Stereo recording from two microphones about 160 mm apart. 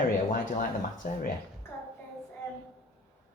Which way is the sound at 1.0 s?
60° left (ahead or behind).